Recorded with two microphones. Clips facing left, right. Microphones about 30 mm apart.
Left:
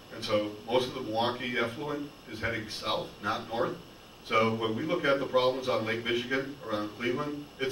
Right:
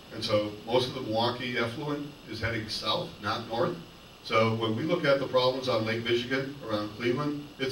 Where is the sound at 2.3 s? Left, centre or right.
Right.